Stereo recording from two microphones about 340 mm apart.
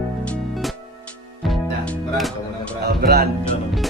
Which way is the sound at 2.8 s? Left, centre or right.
Right.